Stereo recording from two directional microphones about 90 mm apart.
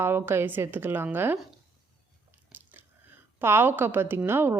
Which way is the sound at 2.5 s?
20° right (ahead or behind).